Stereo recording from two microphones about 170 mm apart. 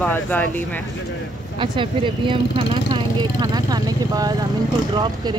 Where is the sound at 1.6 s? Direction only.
30° right (ahead or behind).